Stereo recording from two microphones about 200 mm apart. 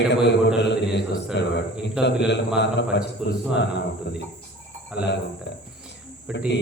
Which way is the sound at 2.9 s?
60° left (ahead or behind).